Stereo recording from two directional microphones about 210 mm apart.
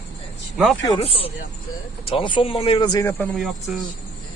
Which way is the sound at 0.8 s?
25° left (ahead or behind).